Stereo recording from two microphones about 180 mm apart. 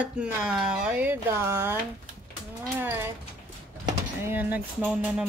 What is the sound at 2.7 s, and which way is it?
Speech, 10° right (ahead or behind).